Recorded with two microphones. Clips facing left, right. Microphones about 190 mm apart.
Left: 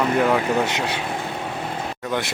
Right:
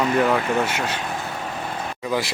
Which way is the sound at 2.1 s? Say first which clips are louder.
Right 2 dB; centre (ahead or behind).